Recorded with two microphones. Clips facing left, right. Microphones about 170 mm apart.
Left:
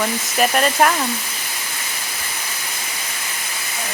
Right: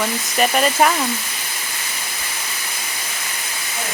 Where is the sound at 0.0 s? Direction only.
Centre (ahead or behind).